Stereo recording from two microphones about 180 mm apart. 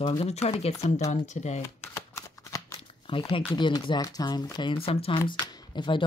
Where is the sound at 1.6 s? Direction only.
15° left (ahead or behind).